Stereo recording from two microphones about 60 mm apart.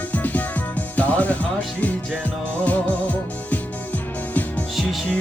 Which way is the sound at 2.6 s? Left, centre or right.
Left.